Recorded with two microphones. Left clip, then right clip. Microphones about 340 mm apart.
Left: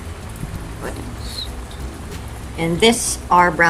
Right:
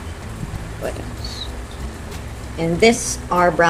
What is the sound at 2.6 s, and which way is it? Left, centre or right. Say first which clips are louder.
A woman's voice: even; centre.